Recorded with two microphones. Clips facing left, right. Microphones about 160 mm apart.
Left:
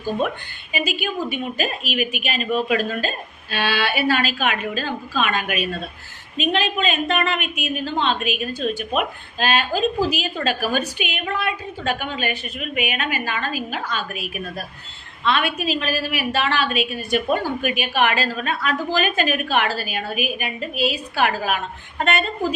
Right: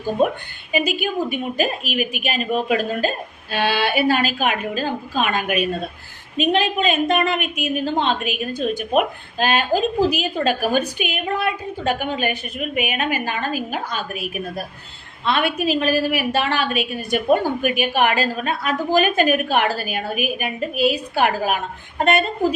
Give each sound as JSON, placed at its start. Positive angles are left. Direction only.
{"t": 0.2, "sound": "a woman's voice", "side_deg": -45}
{"t": 8.5, "sound": "a woman's voice", "side_deg": -15}
{"t": 8.9, "sound": "a woman's voice", "side_deg": -50}